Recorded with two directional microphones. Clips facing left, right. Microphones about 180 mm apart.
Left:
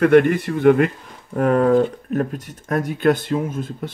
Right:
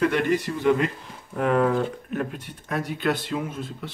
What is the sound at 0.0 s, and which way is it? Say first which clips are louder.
Speech: left 8 dB; 55° left (ahead or behind).